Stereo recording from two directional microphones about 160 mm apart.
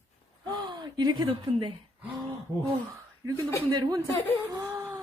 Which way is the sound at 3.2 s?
25° right (ahead or behind).